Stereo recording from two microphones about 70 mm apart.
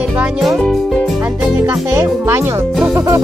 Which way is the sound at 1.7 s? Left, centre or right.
Right.